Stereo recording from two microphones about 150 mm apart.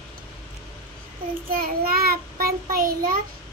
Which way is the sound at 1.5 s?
80° right.